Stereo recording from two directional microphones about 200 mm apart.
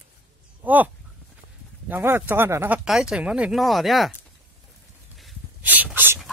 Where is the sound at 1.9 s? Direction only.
10° right (ahead or behind).